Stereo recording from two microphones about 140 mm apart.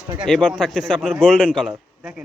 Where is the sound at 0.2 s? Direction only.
Centre (ahead or behind).